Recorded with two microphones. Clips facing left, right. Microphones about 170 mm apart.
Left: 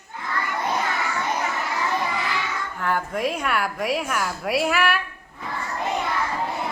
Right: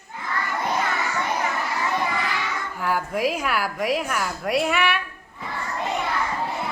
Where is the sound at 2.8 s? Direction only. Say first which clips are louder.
Right 1 dB; 5° right (ahead or behind).